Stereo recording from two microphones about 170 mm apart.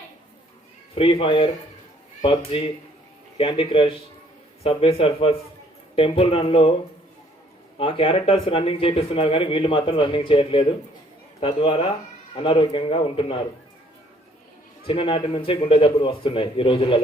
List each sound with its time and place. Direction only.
0.9 s speech: 30° left (ahead or behind)
7.8 s speech: 35° left (ahead or behind)
14.8 s speech: 30° left (ahead or behind)